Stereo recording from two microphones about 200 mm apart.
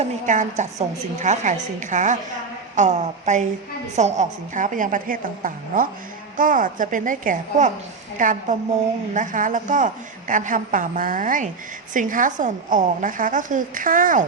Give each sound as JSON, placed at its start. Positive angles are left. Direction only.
{"t": 0.0, "sound": "a woman's voice", "side_deg": -35}